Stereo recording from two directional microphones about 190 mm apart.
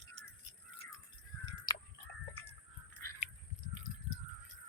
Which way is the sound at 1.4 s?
20° left (ahead or behind).